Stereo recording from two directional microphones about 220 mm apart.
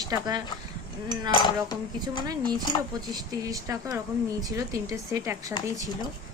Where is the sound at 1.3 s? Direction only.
20° left (ahead or behind).